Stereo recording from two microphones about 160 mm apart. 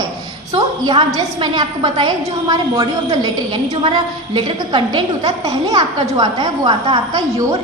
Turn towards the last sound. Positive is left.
turn(degrees=-30)  # may be behind; listen again after turning